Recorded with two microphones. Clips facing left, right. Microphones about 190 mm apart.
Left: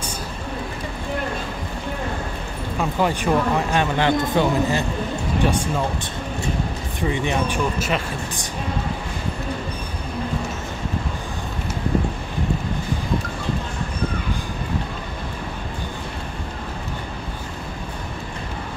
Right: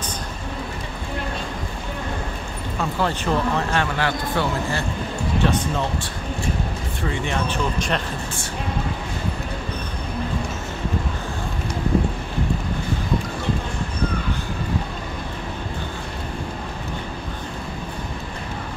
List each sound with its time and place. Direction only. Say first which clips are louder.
2.8 s speech: left 2 dB; 15° left (ahead or behind)
7.0 s speech: left 3 dB; 15° left (ahead or behind)